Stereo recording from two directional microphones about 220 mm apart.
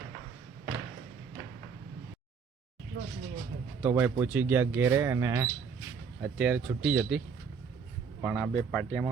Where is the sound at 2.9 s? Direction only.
55° right (ahead or behind).